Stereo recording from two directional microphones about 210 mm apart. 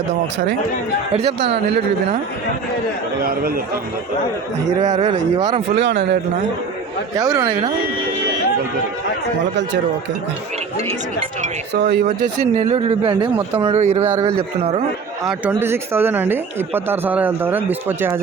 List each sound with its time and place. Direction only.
1.2 s speech: 50° right (ahead or behind)
3.2 s speech: 45° right (ahead or behind)
4.8 s a man's voice: 30° right (ahead or behind)
5.8 s speech: 55° right (ahead or behind)
7.2 s speech: 15° right (ahead or behind)
11.7 s speech: 50° right (ahead or behind)
12.5 s a man's voice: 30° right (ahead or behind)
14.1 s speech: 15° right (ahead or behind)